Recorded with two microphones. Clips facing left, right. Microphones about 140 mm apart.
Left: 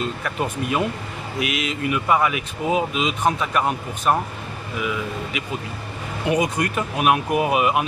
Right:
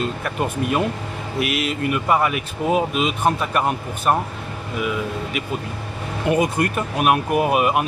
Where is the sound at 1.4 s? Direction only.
50° right (ahead or behind).